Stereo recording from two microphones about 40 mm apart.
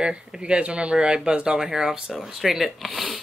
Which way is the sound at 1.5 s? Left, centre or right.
Centre.